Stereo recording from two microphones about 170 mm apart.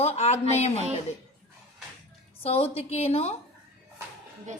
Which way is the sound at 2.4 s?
35° left (ahead or behind).